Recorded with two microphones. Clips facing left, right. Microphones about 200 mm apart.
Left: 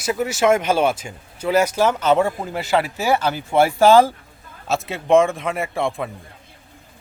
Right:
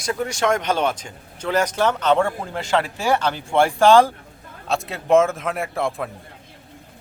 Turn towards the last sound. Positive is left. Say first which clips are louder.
# left 1 dB
turn(degrees=0)  # may be behind; listen again after turning